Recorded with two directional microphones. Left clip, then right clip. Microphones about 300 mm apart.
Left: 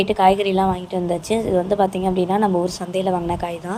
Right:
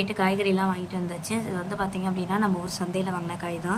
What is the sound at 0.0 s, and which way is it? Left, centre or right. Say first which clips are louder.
A woman's voice: left 10 dB; centre.